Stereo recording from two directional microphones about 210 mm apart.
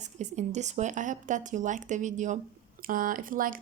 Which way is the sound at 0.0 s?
35° right (ahead or behind).